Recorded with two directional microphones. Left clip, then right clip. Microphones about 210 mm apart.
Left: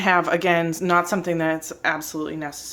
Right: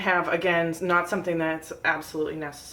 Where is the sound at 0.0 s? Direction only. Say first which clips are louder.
Left 4 dB; 40° left (ahead or behind).